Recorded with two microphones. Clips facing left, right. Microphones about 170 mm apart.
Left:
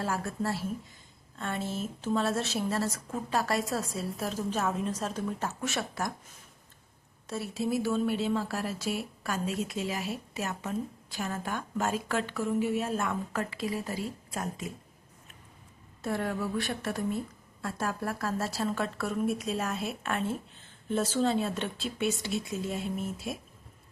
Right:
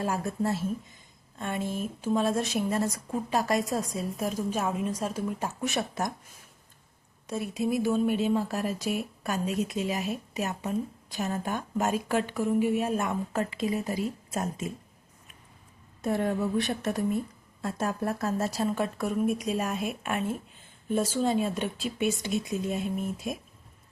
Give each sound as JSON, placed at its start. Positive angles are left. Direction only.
{"t": 0.0, "sound": "speech", "side_deg": -15}
{"t": 7.3, "sound": "speech", "side_deg": -15}
{"t": 16.0, "sound": "speech", "side_deg": -20}